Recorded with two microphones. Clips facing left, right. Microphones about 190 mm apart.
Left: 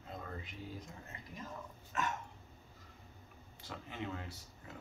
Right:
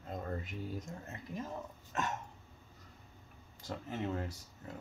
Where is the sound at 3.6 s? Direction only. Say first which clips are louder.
Right 5 dB; 40° right (ahead or behind).